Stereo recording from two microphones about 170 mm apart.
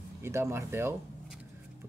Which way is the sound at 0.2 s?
15° right (ahead or behind).